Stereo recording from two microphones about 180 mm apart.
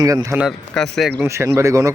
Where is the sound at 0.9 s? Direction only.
Centre (ahead or behind).